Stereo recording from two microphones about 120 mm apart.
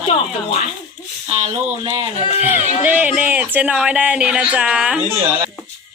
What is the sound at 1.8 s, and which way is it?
Speech, 45° right (ahead or behind).